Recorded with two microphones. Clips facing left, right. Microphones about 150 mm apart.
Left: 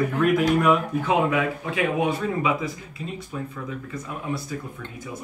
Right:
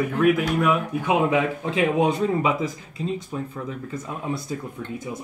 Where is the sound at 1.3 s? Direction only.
25° right (ahead or behind).